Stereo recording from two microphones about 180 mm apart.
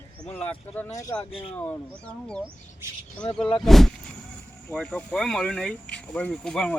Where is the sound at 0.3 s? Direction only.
10° left (ahead or behind).